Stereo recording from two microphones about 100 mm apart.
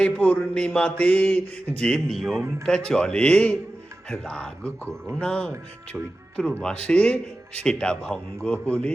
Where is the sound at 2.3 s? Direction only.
25° right (ahead or behind).